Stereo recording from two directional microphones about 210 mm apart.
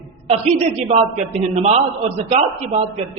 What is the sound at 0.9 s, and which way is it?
Speech, 30° right (ahead or behind).